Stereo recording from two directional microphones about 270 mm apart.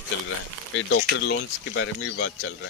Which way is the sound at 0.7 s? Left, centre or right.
Left.